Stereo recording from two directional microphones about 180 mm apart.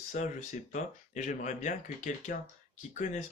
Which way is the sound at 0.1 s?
45° left (ahead or behind).